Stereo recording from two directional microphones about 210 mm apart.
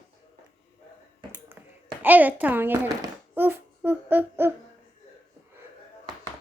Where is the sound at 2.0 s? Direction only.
10° right (ahead or behind).